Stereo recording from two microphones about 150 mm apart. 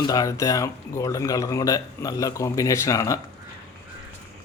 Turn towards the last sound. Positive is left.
turn(degrees=20)  # may be behind; listen again after turning